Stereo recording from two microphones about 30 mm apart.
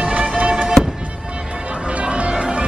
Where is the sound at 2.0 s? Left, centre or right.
Right.